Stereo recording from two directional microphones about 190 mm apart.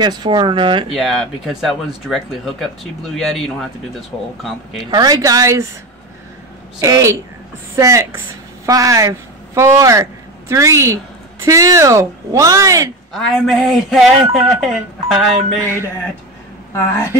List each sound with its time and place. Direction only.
0.0 s speech: 25° right (ahead or behind)
0.9 s a sound: centre (ahead or behind)
4.9 s speech: 20° right (ahead or behind)
6.8 s speech: 15° right (ahead or behind)
13.1 s a sound: centre (ahead or behind)
15.6 s speech: 15° right (ahead or behind)
16.7 s speech: 15° left (ahead or behind)